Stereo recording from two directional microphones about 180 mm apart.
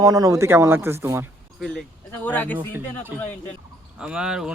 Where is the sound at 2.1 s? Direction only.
10° left (ahead or behind).